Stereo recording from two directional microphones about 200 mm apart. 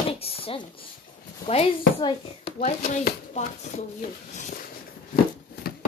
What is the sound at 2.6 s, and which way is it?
Speech, 40° left (ahead or behind).